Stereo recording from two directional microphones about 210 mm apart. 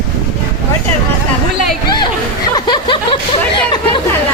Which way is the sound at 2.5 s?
20° left (ahead or behind).